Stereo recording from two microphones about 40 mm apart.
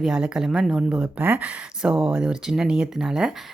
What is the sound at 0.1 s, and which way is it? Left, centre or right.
Speech, right.